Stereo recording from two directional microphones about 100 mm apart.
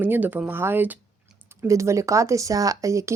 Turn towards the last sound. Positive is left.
turn(degrees=-30)  # may be behind; listen again after turning